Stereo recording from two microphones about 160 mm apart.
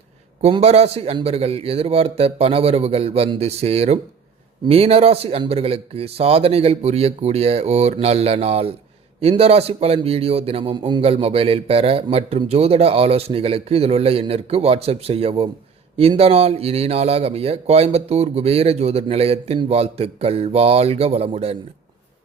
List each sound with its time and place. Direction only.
0.4 s a man's voice: 40° right (ahead or behind)